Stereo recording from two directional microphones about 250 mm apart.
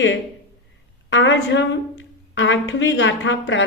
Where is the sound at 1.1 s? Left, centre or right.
Left.